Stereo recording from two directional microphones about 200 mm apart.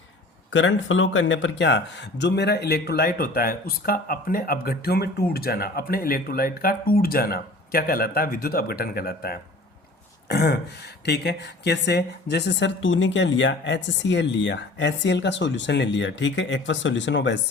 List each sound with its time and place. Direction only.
0.5 s speech: 70° left (ahead or behind)